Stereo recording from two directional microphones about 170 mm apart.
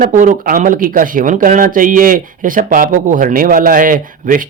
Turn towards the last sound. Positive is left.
turn(degrees=-55)  # may be behind; listen again after turning